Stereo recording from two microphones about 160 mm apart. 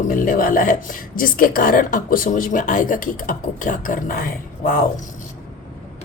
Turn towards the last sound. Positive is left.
turn(degrees=60)  # may be behind; listen again after turning